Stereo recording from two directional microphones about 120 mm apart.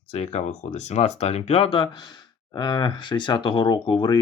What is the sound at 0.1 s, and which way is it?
Speech, 65° left (ahead or behind).